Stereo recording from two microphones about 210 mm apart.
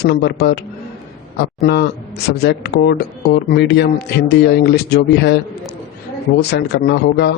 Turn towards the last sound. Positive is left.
turn(degrees=50)  # may be behind; listen again after turning